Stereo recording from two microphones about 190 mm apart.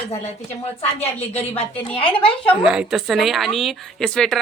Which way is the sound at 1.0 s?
35° left (ahead or behind).